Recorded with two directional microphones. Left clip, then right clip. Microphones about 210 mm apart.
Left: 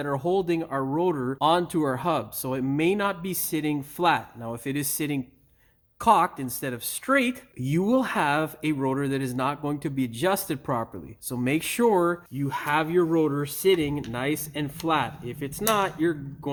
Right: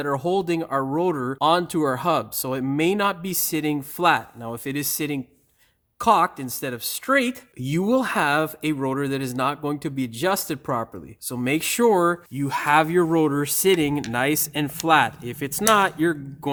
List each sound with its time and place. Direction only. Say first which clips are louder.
0.0 s speech: right 2 dB; 25° right (ahead or behind)
12.4 s speech: right 7 dB; 50° right (ahead or behind)